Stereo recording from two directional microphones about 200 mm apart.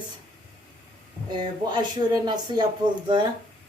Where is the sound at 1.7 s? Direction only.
20° right (ahead or behind).